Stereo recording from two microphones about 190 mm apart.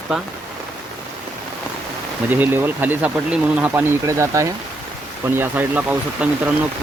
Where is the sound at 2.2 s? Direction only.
10° right (ahead or behind).